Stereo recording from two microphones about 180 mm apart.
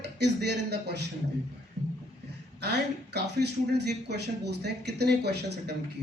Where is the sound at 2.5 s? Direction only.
65° right (ahead or behind).